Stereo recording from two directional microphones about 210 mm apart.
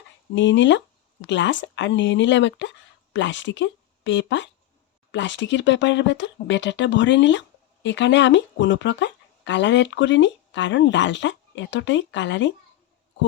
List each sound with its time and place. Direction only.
0.3 s speech: 60° left (ahead or behind)